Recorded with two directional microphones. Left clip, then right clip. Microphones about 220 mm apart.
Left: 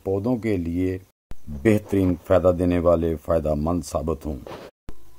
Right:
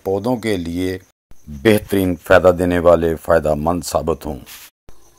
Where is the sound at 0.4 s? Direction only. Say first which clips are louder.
Right 4 dB; 60° right (ahead or behind).